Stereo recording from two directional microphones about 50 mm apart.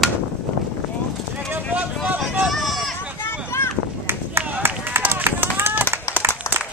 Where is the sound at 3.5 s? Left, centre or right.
Left.